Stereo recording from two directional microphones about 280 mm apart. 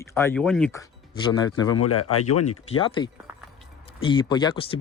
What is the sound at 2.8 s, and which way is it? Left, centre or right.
Speech, centre.